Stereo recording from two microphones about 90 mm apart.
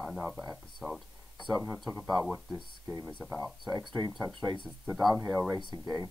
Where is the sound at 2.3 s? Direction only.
25° right (ahead or behind).